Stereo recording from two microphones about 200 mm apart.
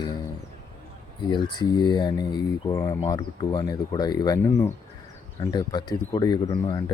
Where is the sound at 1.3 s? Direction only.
20° left (ahead or behind).